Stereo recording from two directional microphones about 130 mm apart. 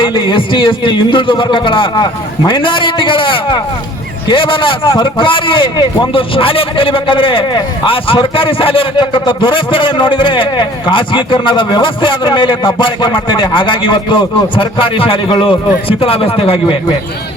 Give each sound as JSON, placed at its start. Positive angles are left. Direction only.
{"t": 0.0, "sound": "a man's voice", "side_deg": 40}